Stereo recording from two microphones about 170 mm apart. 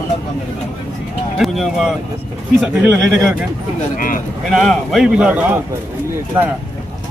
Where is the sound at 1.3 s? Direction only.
Centre (ahead or behind).